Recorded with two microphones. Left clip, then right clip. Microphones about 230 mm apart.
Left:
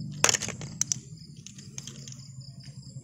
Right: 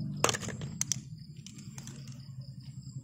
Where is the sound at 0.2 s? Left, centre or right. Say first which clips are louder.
Left 5 dB; centre.